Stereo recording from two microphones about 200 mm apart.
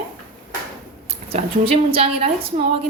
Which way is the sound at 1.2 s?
30° right (ahead or behind).